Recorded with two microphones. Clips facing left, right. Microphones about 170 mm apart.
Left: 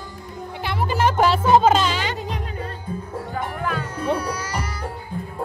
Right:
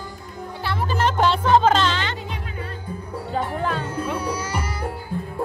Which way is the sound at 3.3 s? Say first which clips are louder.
Right 3 dB; 30° right (ahead or behind).